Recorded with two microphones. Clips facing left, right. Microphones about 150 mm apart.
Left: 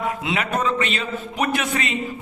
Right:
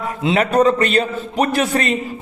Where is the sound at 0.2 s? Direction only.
30° right (ahead or behind).